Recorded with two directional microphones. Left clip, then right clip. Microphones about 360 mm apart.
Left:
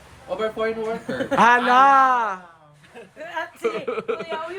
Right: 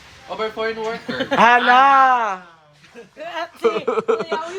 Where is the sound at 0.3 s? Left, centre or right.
Centre.